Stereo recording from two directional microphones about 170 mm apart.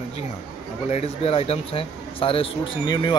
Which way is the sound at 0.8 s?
40° left (ahead or behind).